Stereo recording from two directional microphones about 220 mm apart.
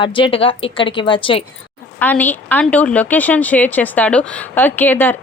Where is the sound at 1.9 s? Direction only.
5° left (ahead or behind).